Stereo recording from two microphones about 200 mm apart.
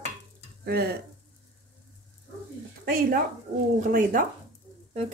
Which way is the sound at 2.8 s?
45° right (ahead or behind).